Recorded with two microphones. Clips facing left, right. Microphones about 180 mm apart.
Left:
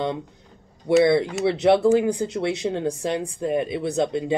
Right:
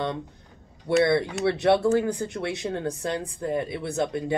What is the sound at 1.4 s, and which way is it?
Speech, 20° left (ahead or behind).